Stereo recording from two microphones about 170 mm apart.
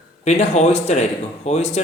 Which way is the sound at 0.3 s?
40° left (ahead or behind).